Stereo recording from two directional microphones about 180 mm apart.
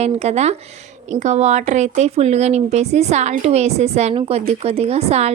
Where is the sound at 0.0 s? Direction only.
35° right (ahead or behind).